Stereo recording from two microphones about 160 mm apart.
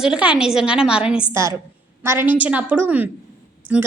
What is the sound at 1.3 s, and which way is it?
A woman's voice, 15° right (ahead or behind).